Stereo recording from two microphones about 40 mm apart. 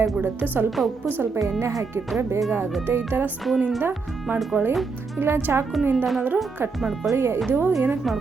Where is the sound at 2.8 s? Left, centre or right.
Right.